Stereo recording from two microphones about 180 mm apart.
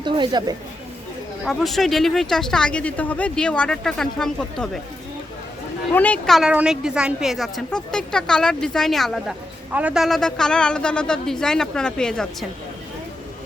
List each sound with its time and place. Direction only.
0.0 s speech: 25° right (ahead or behind)
1.5 s a woman's voice: centre (ahead or behind)
5.9 s a woman's voice: 10° left (ahead or behind)